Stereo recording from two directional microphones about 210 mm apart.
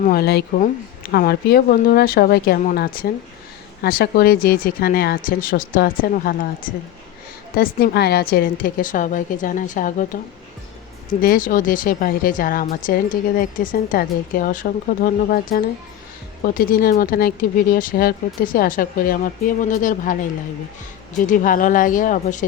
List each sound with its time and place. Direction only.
0.1 s a woman's voice: 50° left (ahead or behind)
11.2 s a woman's voice: 40° left (ahead or behind)
21.2 s a woman's voice: 40° left (ahead or behind)